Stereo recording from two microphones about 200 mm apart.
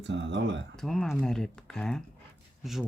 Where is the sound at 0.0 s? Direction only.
65° right (ahead or behind).